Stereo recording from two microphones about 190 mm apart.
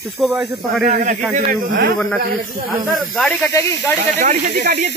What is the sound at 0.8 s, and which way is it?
Speech, 45° right (ahead or behind).